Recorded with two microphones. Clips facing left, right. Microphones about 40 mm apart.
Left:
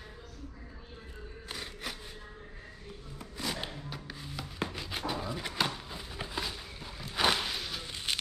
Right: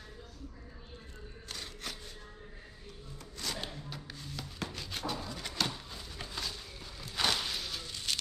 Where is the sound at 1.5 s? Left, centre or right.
Centre.